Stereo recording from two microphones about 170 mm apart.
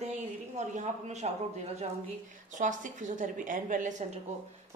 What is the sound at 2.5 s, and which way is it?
A woman's voice, 50° right (ahead or behind).